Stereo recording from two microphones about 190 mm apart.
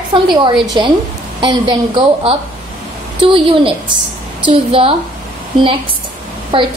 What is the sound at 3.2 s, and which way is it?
A woman's voice, 25° right (ahead or behind).